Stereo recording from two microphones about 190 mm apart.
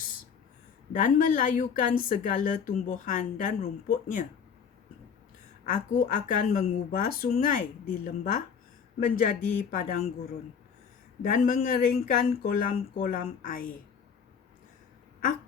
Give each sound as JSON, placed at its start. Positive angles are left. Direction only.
{"t": 1.0, "sound": "a woman's voice", "side_deg": 45}
{"t": 5.6, "sound": "a woman's voice", "side_deg": 45}
{"t": 11.2, "sound": "a woman's voice", "side_deg": 45}